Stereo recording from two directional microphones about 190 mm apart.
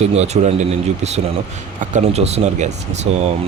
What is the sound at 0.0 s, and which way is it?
A man's voice, 35° right (ahead or behind).